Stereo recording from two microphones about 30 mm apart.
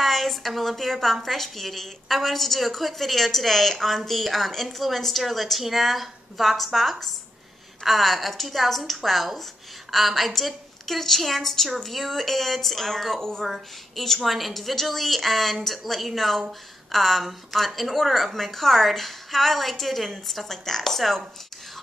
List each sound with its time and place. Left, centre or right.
0.0 s a woman's voice: centre
13.5 s a woman's voice: centre